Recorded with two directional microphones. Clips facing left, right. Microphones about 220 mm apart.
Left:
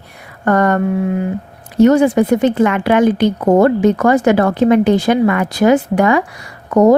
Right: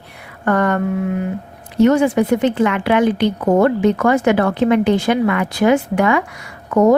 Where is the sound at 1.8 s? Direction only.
40° left (ahead or behind).